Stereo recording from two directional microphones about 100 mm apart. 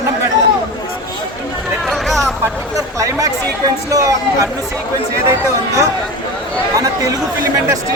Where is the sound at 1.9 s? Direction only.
5° left (ahead or behind).